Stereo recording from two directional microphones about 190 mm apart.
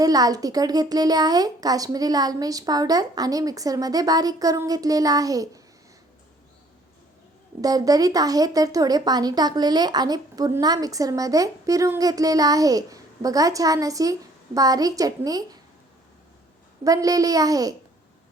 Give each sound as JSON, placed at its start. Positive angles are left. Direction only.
{"t": 0.0, "sound": "speech", "side_deg": -20}
{"t": 7.6, "sound": "speech", "side_deg": -20}
{"t": 16.8, "sound": "speech", "side_deg": -20}